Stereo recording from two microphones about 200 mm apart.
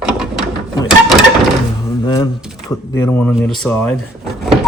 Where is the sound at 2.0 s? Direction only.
20° left (ahead or behind).